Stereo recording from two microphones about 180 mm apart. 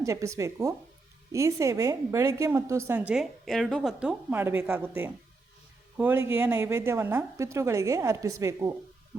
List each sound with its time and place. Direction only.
0.0 s a woman's voice: 15° right (ahead or behind)
3.1 s a woman's voice: centre (ahead or behind); by 8.7 s 15° right (ahead or behind)